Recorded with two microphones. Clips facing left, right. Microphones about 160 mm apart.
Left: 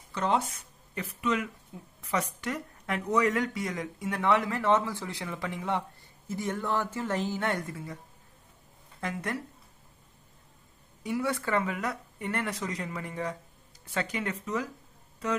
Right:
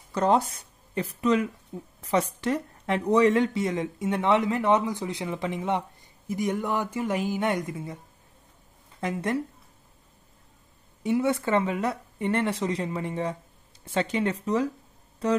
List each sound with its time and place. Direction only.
0.1 s speech: 40° right (ahead or behind); by 8.0 s 20° right (ahead or behind)
9.0 s speech: 25° right (ahead or behind)
11.1 s speech: 25° right (ahead or behind)